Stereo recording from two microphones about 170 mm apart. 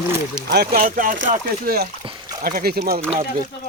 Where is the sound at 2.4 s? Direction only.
60° right (ahead or behind).